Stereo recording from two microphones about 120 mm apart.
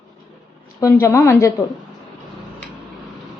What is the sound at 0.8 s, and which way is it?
Speech, 20° left (ahead or behind).